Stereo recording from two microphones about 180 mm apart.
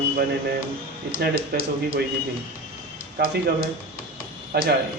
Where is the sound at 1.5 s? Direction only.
60° right (ahead or behind).